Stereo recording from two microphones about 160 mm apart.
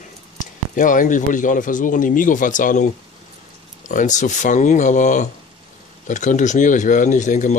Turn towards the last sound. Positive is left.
turn(degrees=50)  # may be behind; listen again after turning